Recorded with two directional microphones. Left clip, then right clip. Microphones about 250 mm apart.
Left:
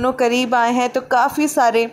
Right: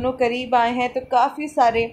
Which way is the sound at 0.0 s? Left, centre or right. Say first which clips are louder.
Left 4 dB; left.